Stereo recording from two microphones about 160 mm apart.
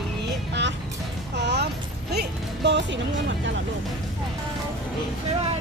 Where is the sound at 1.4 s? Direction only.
90° right.